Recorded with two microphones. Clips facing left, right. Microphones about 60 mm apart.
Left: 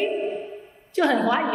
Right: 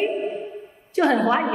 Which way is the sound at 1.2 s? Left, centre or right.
Centre.